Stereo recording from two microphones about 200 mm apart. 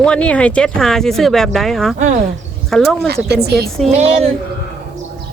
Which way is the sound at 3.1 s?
55° right (ahead or behind).